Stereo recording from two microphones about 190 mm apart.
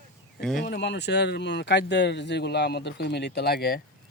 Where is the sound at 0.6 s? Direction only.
65° left (ahead or behind).